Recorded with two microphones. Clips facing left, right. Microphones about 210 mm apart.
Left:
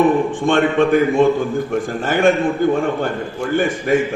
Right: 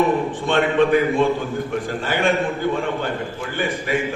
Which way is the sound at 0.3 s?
45° left (ahead or behind).